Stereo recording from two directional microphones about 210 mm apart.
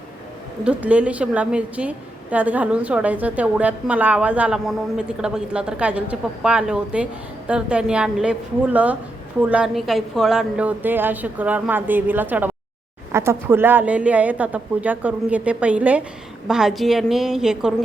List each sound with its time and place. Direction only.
0.6 s a woman's voice: 5° right (ahead or behind)